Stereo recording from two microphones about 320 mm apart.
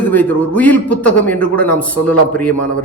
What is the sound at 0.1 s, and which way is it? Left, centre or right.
A man's voice, centre.